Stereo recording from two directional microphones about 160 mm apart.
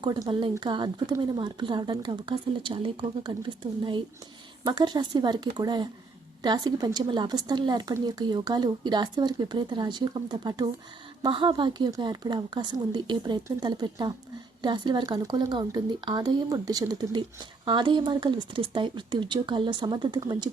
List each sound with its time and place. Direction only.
0.0 s speech: 25° right (ahead or behind)